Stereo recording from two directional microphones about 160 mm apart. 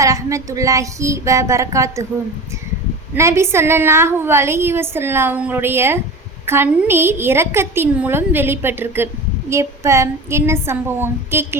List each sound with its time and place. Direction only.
0.0 s child singing: 20° right (ahead or behind)
3.2 s a woman's voice: 15° right (ahead or behind)